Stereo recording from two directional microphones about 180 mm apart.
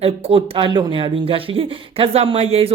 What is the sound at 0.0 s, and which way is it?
Speech, 35° right (ahead or behind).